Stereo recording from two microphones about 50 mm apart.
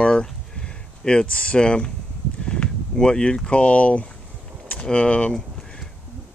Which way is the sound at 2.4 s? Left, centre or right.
Centre.